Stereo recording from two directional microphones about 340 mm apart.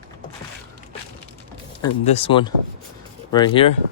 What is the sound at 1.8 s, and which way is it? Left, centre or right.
Speech, centre.